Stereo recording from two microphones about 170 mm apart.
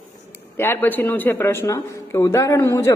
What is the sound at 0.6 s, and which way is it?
Speech, 10° left (ahead or behind).